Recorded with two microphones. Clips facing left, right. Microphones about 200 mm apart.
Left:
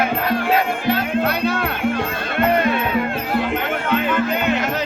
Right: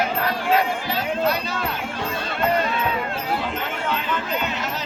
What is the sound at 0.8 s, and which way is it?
Music, 55° left (ahead or behind).